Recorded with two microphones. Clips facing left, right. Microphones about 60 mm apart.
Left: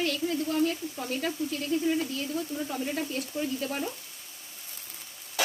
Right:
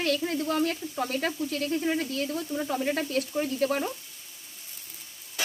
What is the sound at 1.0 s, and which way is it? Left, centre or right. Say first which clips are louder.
Speech: right 2 dB; right.